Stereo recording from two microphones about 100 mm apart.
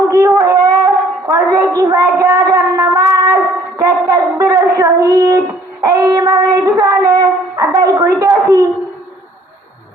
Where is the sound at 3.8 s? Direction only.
35° right (ahead or behind).